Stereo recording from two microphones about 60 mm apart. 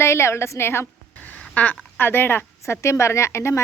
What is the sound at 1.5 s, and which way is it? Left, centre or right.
Speech, left.